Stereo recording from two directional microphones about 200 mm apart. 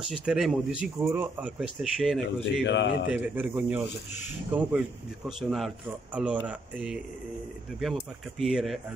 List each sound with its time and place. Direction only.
0.1 s speech: 5° right (ahead or behind)
2.6 s a man's voice: 60° left (ahead or behind)
3.1 s a man's voice: 10° right (ahead or behind)
6.1 s speech: 5° right (ahead or behind)